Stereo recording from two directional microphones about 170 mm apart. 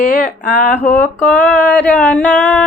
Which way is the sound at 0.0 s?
55° left (ahead or behind).